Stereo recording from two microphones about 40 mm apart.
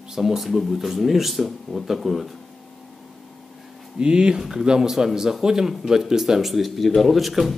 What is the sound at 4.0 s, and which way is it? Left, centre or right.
Speech, right.